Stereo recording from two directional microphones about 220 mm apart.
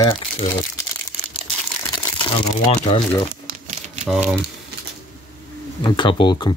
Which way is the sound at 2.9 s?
25° left (ahead or behind).